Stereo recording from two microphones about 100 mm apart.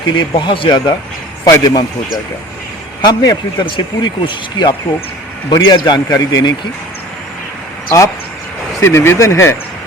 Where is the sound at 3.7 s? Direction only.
55° left (ahead or behind).